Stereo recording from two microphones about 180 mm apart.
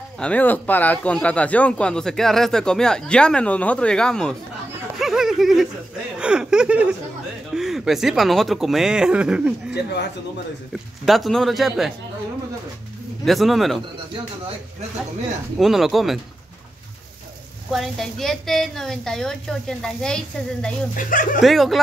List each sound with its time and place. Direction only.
0.2 s speech: 10° left (ahead or behind)
4.9 s a sound: centre (ahead or behind)
6.1 s speech: 5° right (ahead or behind)
13.2 s speech: centre (ahead or behind)
15.6 s speech: centre (ahead or behind)
17.6 s speech: centre (ahead or behind)
20.9 s speech: 50° left (ahead or behind)
21.4 s speech: centre (ahead or behind)